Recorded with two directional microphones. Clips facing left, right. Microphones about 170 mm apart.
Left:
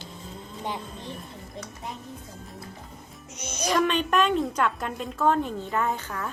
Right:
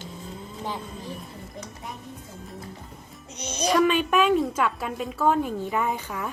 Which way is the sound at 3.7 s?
5° right (ahead or behind).